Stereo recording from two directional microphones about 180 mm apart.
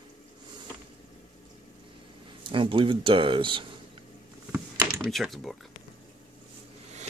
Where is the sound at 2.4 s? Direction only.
30° right (ahead or behind).